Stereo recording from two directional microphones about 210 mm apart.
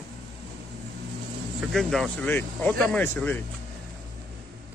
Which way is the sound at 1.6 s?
Centre (ahead or behind).